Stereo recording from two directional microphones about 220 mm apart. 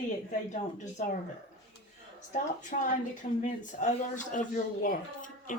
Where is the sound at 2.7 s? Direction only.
35° left (ahead or behind).